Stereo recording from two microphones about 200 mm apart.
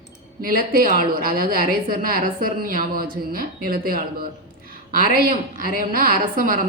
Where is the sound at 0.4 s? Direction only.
45° right (ahead or behind).